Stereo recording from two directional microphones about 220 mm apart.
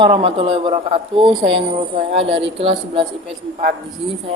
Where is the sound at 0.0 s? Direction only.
25° right (ahead or behind).